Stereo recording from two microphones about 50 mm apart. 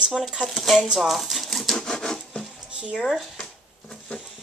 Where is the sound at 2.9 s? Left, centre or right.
Centre.